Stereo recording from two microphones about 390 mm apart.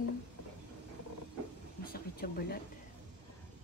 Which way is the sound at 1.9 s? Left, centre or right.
Left.